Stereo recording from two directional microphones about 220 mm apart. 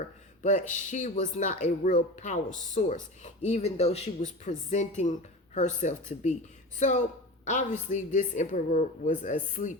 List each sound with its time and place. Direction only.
0.4 s speech: 35° left (ahead or behind)